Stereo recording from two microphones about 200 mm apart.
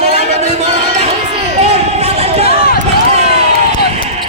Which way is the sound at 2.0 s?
30° right (ahead or behind).